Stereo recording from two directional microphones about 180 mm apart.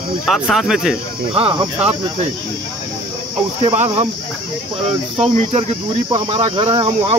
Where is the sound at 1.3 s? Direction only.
30° right (ahead or behind).